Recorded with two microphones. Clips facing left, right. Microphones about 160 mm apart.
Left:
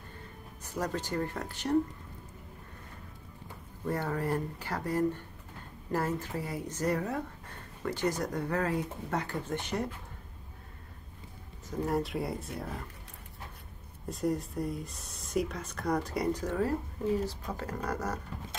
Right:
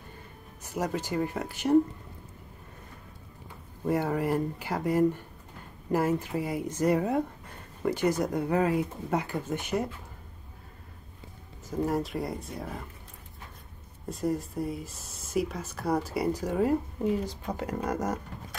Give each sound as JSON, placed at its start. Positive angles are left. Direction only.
{"t": 0.7, "sound": "speech", "side_deg": -10}
{"t": 3.8, "sound": "speech", "side_deg": -10}
{"t": 11.8, "sound": "speech", "side_deg": 0}
{"t": 14.0, "sound": "speech", "side_deg": 0}